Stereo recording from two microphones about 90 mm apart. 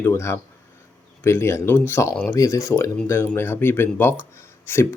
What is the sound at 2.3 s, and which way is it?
Speech, 40° left (ahead or behind).